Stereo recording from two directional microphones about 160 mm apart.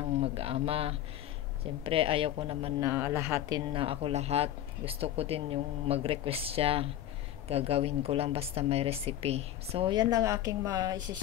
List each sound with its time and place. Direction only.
0.2 s speech: 35° right (ahead or behind)
2.8 s speech: 15° right (ahead or behind)